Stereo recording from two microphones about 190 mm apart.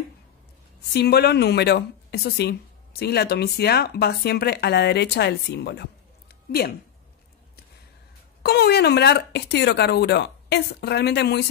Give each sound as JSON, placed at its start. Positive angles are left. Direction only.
{"t": 0.9, "sound": "a woman's voice", "side_deg": 55}
{"t": 8.4, "sound": "a woman's voice", "side_deg": 55}